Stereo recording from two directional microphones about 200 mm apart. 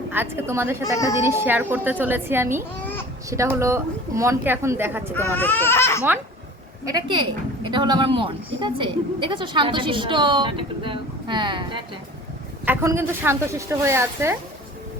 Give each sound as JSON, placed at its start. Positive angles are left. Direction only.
{"t": 0.1, "sound": "a woman's voice", "side_deg": -10}
{"t": 2.8, "sound": "babbling", "side_deg": 10}
{"t": 3.2, "sound": "a woman's voice", "side_deg": -15}
{"t": 5.3, "sound": "speech", "side_deg": 10}
{"t": 6.9, "sound": "a woman's voice", "side_deg": -25}
{"t": 12.6, "sound": "a woman's voice", "side_deg": -10}